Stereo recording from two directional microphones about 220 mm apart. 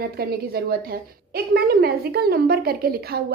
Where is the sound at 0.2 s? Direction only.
45° right (ahead or behind).